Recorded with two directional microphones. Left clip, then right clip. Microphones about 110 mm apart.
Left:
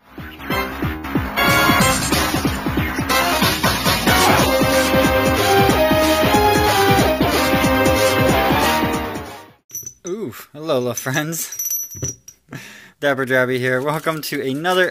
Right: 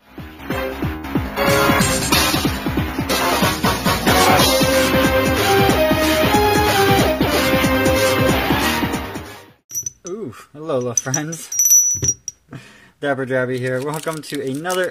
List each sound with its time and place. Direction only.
0.5 s music: centre (ahead or behind)
10.6 s speech: 25° left (ahead or behind)
13.0 s speech: 30° left (ahead or behind); by 14.1 s 50° left (ahead or behind)
14.1 s speech: 35° left (ahead or behind)